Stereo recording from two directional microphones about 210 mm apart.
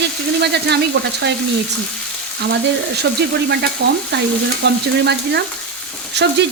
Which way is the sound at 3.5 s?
55° right (ahead or behind).